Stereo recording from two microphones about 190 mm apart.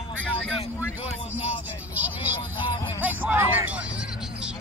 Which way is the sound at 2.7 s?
20° left (ahead or behind).